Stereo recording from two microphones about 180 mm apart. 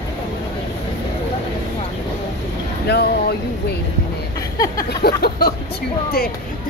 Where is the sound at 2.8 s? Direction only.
65° left (ahead or behind).